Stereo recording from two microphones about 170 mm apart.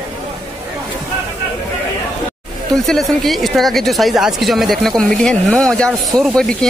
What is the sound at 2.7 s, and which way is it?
Speech, centre (ahead or behind).